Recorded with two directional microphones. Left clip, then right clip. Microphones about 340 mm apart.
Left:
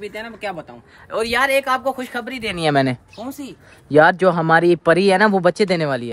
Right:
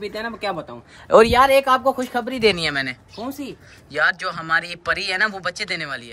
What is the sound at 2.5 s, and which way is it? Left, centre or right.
Speech, centre.